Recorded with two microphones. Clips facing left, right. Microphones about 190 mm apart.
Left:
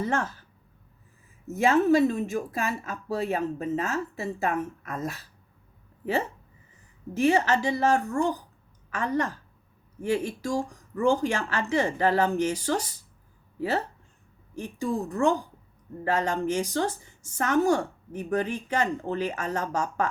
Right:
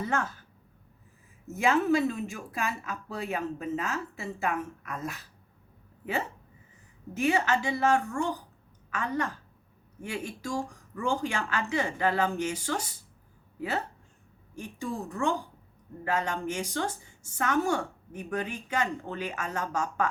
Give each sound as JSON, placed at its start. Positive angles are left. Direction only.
{"t": 1.5, "sound": "a woman's voice", "side_deg": 40}
{"t": 7.1, "sound": "a woman's voice", "side_deg": 40}